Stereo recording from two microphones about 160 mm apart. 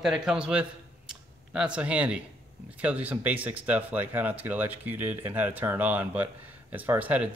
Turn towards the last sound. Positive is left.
turn(degrees=-10)  # may be behind; listen again after turning